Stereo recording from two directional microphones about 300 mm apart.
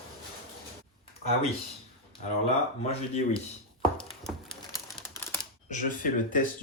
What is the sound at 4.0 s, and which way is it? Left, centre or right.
Typewriter, centre.